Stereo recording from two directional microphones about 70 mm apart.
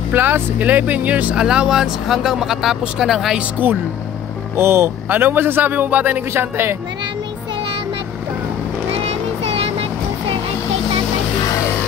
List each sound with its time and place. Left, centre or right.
0.1 s speech: right
1.3 s speech: centre
3.3 s speech: right
4.6 s speech: right